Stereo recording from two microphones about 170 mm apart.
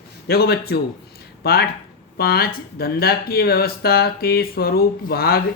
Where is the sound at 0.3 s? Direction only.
65° left (ahead or behind).